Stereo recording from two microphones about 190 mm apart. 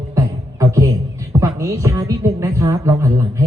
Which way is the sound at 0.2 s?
15° right (ahead or behind).